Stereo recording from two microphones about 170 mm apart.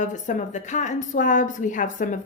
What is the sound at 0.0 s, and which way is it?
A woman's voice, 45° left (ahead or behind).